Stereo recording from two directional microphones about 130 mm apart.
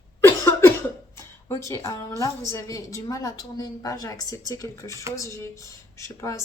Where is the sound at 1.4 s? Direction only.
25° left (ahead or behind).